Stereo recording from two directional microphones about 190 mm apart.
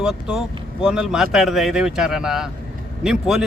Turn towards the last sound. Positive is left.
turn(degrees=0)  # may be behind; listen again after turning